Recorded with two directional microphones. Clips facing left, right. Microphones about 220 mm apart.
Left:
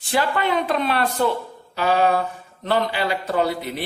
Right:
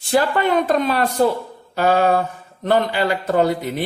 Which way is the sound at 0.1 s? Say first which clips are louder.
Right 4 dB; 45° right (ahead or behind).